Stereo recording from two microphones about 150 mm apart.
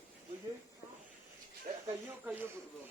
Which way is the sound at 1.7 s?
70° right (ahead or behind).